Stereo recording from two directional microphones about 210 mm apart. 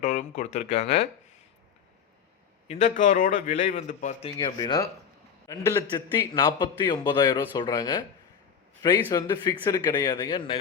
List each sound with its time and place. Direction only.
0.0 s a man's voice: 35° left (ahead or behind)
2.6 s a man's voice: 40° left (ahead or behind)
4.4 s a man's voice: 20° left (ahead or behind)